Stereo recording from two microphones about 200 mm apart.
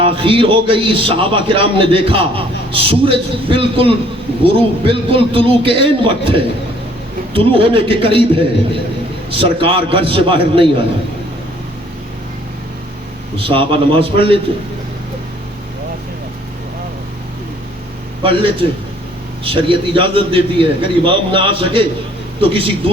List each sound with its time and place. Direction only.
0.0 s a man's voice: 25° right (ahead or behind)
13.3 s a man's voice: 25° right (ahead or behind)
18.2 s a man's voice: 25° right (ahead or behind)